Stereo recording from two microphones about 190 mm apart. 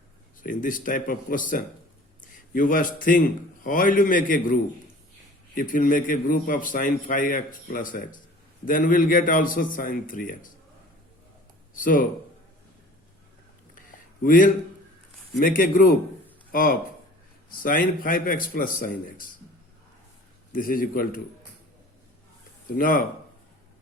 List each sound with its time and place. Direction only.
0.4 s a man's voice: 45° left (ahead or behind)
11.8 s a man's voice: 45° left (ahead or behind)
14.2 s a man's voice: 45° left (ahead or behind)
20.5 s a man's voice: 45° left (ahead or behind)
22.6 s speech: 45° left (ahead or behind)